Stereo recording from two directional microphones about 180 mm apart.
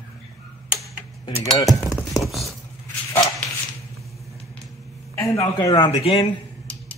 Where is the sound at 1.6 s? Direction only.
Centre (ahead or behind).